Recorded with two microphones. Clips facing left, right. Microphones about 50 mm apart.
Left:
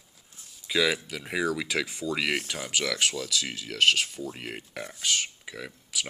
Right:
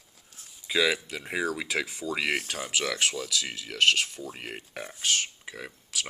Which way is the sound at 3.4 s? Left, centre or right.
Centre.